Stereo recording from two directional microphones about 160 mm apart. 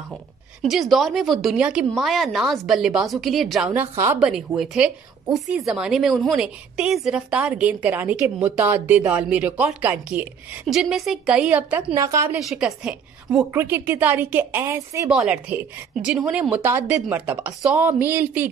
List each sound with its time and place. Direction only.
0.6 s a woman's voice: centre (ahead or behind)
3.7 s a woman's voice: 15° right (ahead or behind)
4.2 s a woman's voice: 5° right (ahead or behind)
11.9 s a woman's voice: 20° right (ahead or behind)
12.4 s a woman's voice: centre (ahead or behind)
13.5 s a woman's voice: 15° right (ahead or behind)
15.0 s a woman's voice: 5° right (ahead or behind)